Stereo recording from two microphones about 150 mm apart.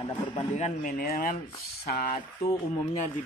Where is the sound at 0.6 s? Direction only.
50° left (ahead or behind).